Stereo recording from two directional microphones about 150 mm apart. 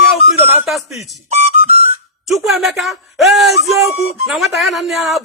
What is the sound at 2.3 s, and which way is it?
Speech, centre (ahead or behind).